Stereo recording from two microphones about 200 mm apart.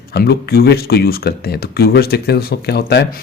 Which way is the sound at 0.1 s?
50° left (ahead or behind).